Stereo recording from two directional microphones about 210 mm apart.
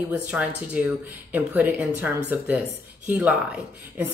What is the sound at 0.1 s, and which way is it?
Speech, 5° right (ahead or behind).